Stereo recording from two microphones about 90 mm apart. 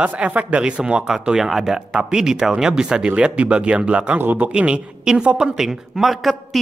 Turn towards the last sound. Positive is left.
turn(degrees=0)  # may be behind; listen again after turning